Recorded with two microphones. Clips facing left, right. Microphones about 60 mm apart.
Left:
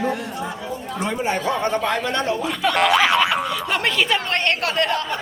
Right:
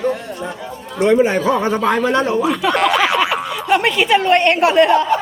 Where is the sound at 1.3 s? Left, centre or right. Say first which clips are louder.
Right 5 dB; right.